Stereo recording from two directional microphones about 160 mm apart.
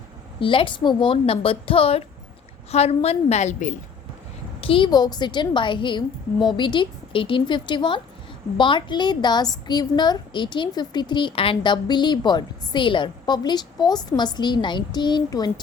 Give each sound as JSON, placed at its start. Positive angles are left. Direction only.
{"t": 0.3, "sound": "a woman's voice", "side_deg": 30}
{"t": 4.6, "sound": "a woman's voice", "side_deg": 35}